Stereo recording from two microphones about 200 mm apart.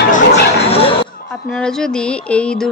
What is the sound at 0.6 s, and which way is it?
Chatter, 30° left (ahead or behind).